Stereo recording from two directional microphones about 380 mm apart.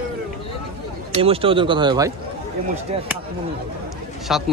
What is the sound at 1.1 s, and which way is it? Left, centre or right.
Speech, centre.